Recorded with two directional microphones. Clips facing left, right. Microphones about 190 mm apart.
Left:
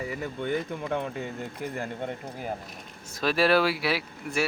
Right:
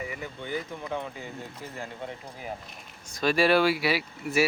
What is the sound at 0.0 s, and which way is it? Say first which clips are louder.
Speech: left 3 dB; 35° left (ahead or behind).